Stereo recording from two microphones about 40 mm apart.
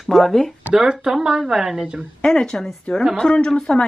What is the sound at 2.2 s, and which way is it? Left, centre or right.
Speech, centre.